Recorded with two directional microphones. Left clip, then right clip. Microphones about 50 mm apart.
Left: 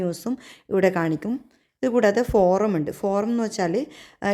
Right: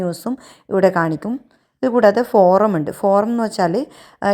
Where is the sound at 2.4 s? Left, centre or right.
Right.